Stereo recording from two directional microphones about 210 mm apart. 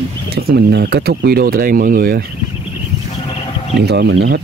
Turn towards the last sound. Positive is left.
turn(degrees=-55)  # may be behind; listen again after turning